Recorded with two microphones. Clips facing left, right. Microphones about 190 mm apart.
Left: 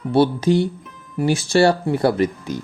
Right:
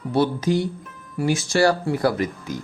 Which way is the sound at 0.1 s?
30° left (ahead or behind).